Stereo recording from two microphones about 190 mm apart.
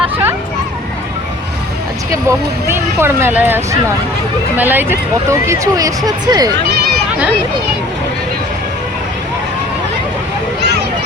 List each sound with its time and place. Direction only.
2.6 s speech: 15° right (ahead or behind)